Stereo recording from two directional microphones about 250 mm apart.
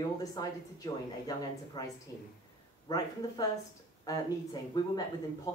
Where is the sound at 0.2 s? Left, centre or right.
Centre.